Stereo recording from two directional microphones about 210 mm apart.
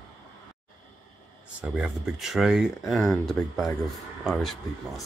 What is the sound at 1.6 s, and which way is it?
Speech, 5° right (ahead or behind).